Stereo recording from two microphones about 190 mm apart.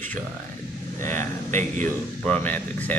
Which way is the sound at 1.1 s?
40° right (ahead or behind).